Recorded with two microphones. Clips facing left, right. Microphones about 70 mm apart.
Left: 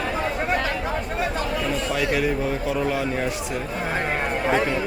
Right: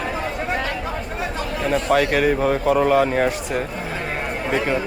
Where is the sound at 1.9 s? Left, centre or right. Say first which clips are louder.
Right 6 dB; right.